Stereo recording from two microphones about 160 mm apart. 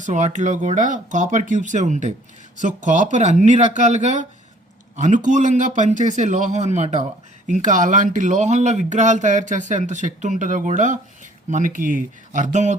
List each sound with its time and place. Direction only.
0.0 s speech: 45° right (ahead or behind)